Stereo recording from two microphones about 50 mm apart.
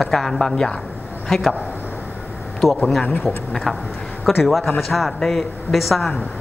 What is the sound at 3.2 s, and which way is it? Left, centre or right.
Speech, centre.